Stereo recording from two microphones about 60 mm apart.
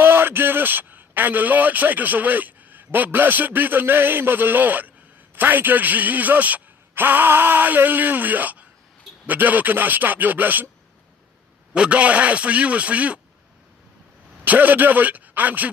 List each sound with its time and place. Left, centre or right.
0.0 s a man's voice: right
11.7 s a man's voice: centre
14.4 s a man's voice: right